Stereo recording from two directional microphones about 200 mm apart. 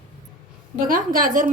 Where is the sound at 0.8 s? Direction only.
45° right (ahead or behind).